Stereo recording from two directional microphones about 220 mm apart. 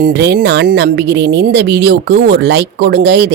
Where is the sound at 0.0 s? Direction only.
50° right (ahead or behind).